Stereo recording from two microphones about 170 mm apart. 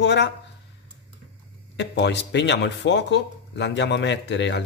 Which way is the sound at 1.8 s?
90° left.